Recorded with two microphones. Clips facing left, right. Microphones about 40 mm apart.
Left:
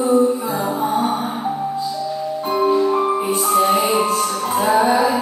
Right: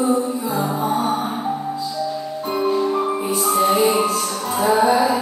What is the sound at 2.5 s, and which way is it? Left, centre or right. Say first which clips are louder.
Music: left 3 dB; centre.